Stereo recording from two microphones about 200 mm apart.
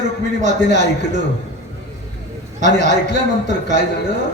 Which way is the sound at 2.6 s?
35° right (ahead or behind).